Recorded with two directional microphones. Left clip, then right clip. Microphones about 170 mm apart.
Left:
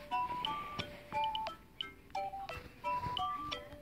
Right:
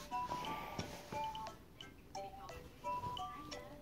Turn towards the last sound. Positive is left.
turn(degrees=30)  # may be behind; listen again after turning